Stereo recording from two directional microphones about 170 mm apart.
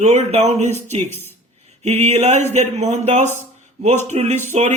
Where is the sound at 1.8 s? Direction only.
40° right (ahead or behind).